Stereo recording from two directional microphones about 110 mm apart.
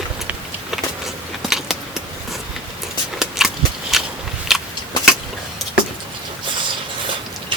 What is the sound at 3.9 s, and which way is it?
Walk, centre (ahead or behind).